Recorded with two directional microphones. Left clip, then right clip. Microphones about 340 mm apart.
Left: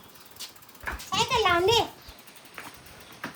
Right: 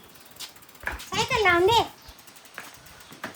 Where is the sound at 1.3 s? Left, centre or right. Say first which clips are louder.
Right 3 dB; right.